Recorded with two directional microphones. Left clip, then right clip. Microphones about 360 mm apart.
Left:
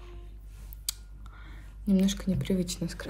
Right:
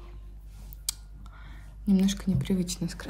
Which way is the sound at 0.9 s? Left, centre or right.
Centre.